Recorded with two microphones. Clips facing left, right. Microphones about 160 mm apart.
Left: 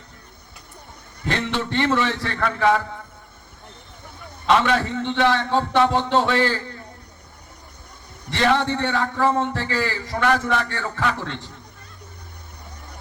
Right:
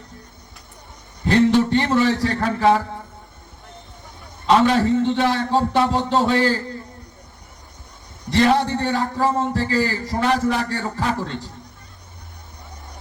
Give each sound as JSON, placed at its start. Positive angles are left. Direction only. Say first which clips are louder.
{"t": 1.5, "sound": "a man's voice", "louder": "right 5 dB", "side_deg": -40}
{"t": 4.4, "sound": "a man's voice", "louder": "right 3 dB", "side_deg": -35}
{"t": 8.3, "sound": "a man's voice", "louder": "right 3 dB", "side_deg": -40}